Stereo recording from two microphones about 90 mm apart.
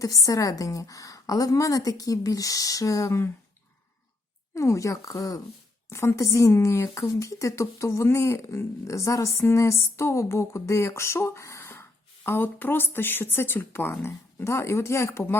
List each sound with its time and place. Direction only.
0.0 s speech: 40° left (ahead or behind)
4.5 s speech: 35° left (ahead or behind)